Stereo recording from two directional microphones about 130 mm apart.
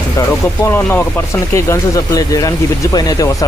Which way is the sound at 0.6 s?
15° left (ahead or behind).